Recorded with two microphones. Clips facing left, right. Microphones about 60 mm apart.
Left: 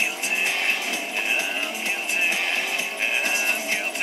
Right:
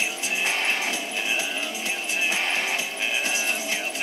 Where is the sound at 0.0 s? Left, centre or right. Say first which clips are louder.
Left 2 dB; left.